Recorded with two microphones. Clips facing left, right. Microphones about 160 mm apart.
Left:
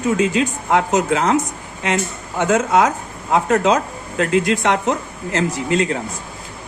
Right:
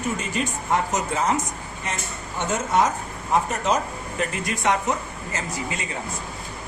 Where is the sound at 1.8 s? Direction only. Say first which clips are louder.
Left 11 dB; 90° left; by 5.9 s 70° left (ahead or behind).